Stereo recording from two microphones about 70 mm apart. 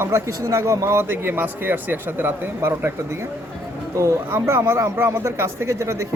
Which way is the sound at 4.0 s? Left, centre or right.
Right.